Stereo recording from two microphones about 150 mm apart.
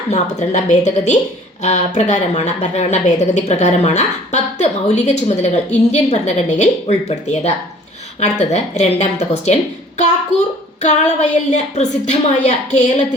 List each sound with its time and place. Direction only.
0.1 s a woman's voice: 50° left (ahead or behind)
10.8 s a woman's voice: 50° left (ahead or behind)